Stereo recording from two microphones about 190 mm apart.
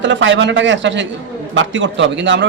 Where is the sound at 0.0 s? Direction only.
75° right (ahead or behind).